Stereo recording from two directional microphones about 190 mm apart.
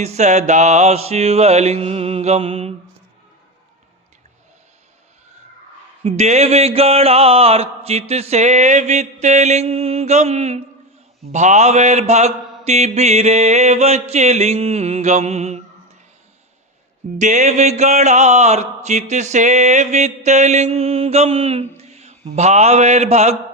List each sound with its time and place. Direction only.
0.0 s music: 35° right (ahead or behind)
6.0 s music: 35° right (ahead or behind)
17.2 s music: 40° right (ahead or behind)